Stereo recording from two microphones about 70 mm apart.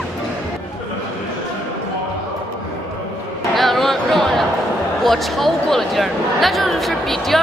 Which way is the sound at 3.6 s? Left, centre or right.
Centre.